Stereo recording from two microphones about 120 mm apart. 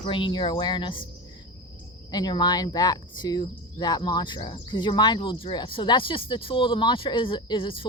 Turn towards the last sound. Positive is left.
turn(degrees=45)  # may be behind; listen again after turning